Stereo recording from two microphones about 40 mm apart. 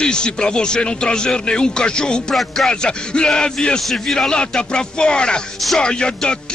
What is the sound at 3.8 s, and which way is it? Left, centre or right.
Speech, centre.